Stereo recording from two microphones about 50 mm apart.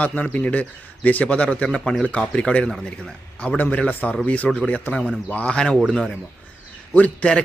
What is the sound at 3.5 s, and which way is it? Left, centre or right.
Speech, left.